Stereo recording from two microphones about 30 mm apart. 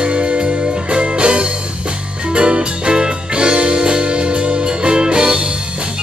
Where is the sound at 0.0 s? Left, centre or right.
Right.